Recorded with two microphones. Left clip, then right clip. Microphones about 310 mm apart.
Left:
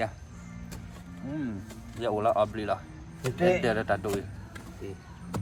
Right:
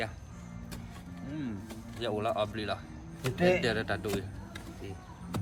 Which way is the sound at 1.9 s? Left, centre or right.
Centre.